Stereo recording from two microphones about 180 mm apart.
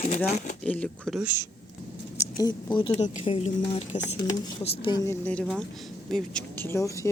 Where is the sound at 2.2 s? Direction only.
20° left (ahead or behind).